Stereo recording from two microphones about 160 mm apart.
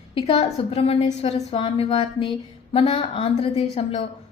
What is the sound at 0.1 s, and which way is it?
A woman's voice, 35° left (ahead or behind).